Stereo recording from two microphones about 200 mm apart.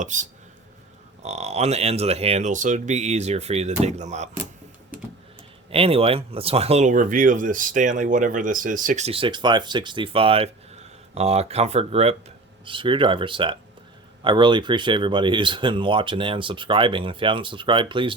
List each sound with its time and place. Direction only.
0.0 s speech: 40° right (ahead or behind)
5.7 s speech: 30° right (ahead or behind)